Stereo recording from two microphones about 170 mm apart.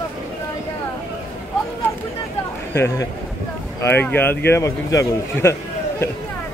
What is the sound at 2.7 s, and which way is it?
A man's voice, 15° left (ahead or behind).